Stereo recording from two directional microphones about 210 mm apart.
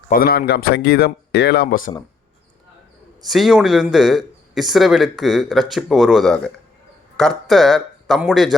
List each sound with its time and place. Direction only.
0.1 s speech: 45° left (ahead or behind)
3.2 s speech: centre (ahead or behind)